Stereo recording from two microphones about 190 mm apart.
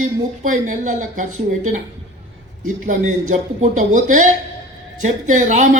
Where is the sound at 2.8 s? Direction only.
40° right (ahead or behind).